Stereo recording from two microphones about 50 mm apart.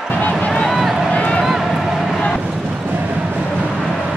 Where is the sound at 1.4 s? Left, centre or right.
Centre.